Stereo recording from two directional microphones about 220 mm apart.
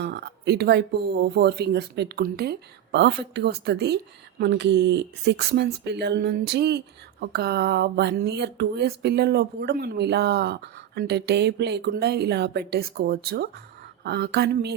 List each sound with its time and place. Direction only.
0.0 s speech: 50° right (ahead or behind)